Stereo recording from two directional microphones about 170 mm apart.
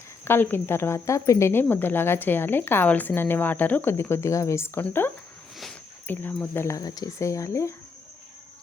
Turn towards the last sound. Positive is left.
turn(degrees=15)  # may be behind; listen again after turning